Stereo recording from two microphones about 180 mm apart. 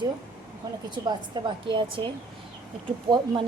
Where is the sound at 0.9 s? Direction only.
25° right (ahead or behind).